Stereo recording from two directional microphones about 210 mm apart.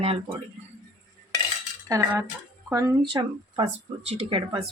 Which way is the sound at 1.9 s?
15° right (ahead or behind).